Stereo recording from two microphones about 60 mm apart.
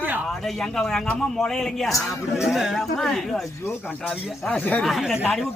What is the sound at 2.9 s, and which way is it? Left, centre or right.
Speech, centre.